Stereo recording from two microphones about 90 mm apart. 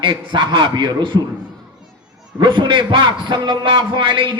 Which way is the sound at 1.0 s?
65° right (ahead or behind).